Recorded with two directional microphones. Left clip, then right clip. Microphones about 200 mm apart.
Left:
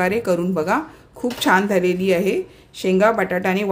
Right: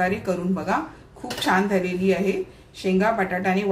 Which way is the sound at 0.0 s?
50° left (ahead or behind).